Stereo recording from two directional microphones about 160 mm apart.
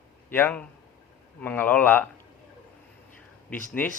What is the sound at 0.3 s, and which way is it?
A man's voice, 10° left (ahead or behind).